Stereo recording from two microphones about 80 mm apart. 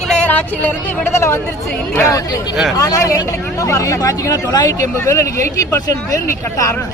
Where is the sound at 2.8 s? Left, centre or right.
Left.